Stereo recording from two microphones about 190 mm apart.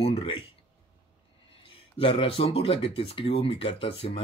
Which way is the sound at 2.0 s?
30° left (ahead or behind).